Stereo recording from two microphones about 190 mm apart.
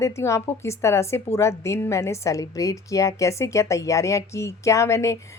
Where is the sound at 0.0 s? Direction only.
15° left (ahead or behind).